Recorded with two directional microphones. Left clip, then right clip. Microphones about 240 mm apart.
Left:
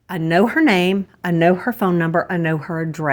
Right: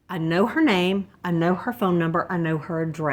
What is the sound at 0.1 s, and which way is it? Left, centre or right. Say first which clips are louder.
Speech: left 6 dB; left.